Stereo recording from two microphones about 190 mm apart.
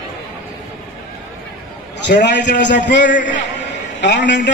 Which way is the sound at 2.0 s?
65° left (ahead or behind).